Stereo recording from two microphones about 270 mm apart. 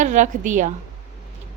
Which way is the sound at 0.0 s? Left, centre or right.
Right.